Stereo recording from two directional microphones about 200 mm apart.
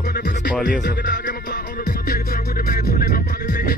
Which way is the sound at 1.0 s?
40° left (ahead or behind).